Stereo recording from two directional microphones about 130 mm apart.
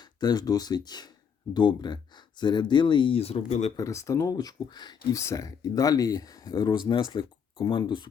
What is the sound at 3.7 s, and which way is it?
Speech, 25° left (ahead or behind).